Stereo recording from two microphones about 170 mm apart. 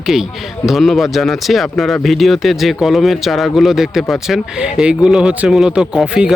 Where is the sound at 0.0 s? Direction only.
5° right (ahead or behind).